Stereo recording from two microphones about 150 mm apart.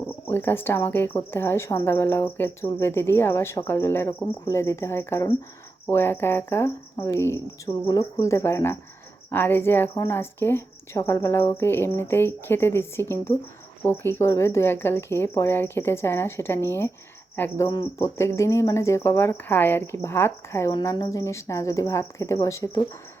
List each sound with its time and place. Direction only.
0.3 s a woman's voice: 15° left (ahead or behind)